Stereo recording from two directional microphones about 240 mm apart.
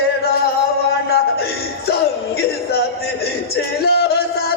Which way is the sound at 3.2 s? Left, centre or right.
Left.